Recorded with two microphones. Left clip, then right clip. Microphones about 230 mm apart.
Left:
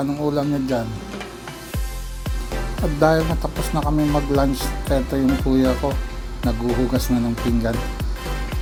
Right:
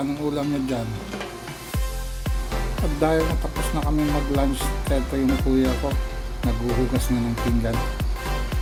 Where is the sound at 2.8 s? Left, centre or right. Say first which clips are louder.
Left 5 dB; centre.